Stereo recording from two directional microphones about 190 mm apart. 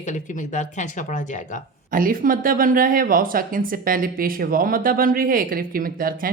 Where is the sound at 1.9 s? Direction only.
45° right (ahead or behind).